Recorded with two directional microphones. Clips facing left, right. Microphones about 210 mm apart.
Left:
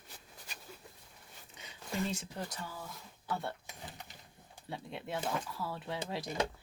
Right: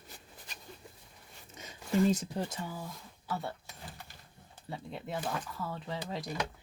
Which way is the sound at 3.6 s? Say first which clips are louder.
Even; 15° left (ahead or behind).